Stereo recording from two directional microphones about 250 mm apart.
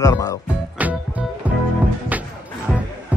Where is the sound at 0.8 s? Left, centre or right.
Centre.